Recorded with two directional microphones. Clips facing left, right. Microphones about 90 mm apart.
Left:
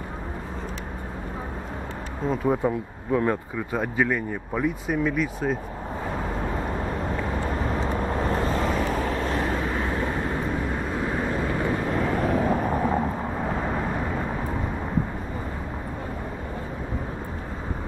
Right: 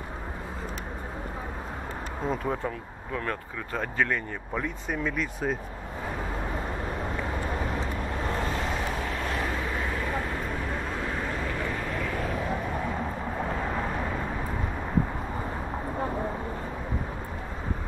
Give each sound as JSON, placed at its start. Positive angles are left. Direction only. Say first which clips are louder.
{"t": 2.2, "sound": "speech", "louder": "left 6 dB", "side_deg": 5}
{"t": 8.5, "sound": "vehicle", "louder": "left 5 dB", "side_deg": 40}
{"t": 11.1, "sound": "vehicle", "louder": "left 5 dB", "side_deg": 25}